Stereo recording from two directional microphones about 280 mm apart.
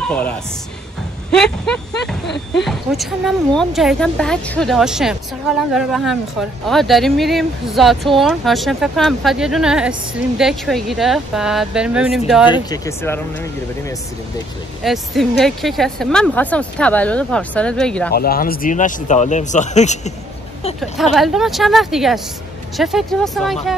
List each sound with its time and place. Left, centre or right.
1.3 s speech: centre
12.5 s speech: centre
18.1 s speech: left
20.8 s speech: centre